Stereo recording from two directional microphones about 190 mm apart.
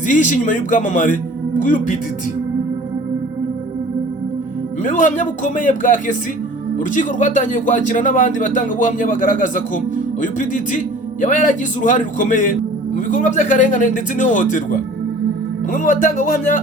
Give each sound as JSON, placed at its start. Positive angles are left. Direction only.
{"t": 0.1, "sound": "speech", "side_deg": 40}
{"t": 4.8, "sound": "speech", "side_deg": 40}